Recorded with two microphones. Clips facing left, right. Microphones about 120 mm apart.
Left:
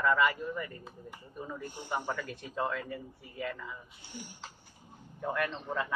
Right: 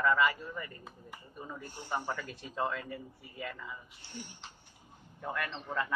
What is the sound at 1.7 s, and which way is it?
Speech, 15° left (ahead or behind).